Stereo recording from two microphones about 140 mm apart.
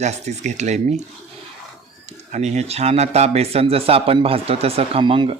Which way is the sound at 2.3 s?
55° right (ahead or behind).